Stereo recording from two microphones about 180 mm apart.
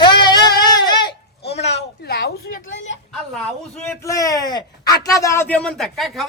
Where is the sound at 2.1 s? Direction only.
65° left (ahead or behind).